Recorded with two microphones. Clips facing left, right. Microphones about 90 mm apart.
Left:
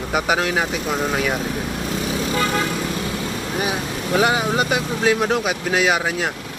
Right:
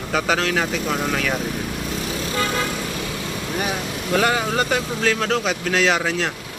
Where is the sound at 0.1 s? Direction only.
15° left (ahead or behind).